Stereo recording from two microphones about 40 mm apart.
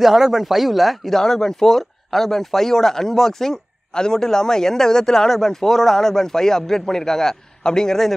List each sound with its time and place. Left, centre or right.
0.0 s speech: centre
1.2 s a man's voice: centre